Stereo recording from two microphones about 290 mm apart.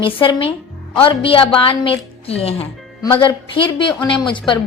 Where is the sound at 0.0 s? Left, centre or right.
Centre.